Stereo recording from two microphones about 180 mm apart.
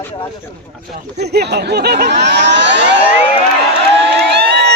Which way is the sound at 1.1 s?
65° right (ahead or behind).